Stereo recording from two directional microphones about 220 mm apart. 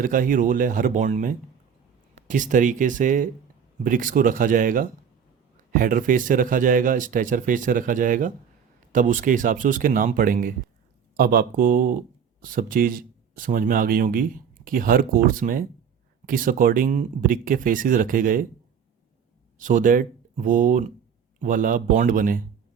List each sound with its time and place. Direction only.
0.0 s speech: 40° right (ahead or behind)
2.3 s speech: 35° right (ahead or behind)
19.5 s speech: 35° right (ahead or behind)